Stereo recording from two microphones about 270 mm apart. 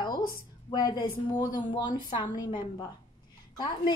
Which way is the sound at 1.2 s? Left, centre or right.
Centre.